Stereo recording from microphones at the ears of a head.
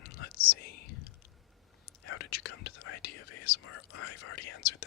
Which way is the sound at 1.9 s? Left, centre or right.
Left.